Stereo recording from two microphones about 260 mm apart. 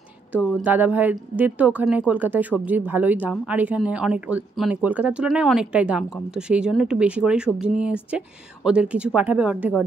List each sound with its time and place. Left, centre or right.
0.6 s speech: centre